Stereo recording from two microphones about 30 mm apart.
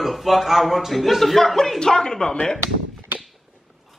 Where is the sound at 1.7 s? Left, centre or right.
Left.